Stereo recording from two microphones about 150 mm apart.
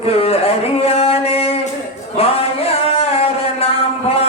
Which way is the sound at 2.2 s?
40° left (ahead or behind).